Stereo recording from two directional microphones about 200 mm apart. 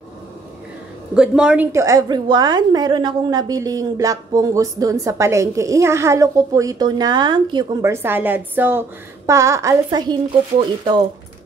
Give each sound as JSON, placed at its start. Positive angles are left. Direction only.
{"t": 1.1, "sound": "a woman's voice", "side_deg": -5}